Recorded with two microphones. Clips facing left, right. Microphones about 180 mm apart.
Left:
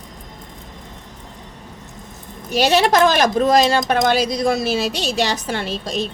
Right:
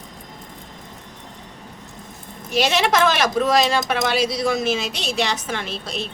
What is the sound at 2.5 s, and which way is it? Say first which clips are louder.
A woman's voice: left 4 dB; 40° left (ahead or behind).